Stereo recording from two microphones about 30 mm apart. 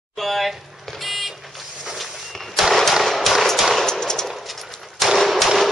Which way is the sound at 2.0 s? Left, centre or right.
Centre.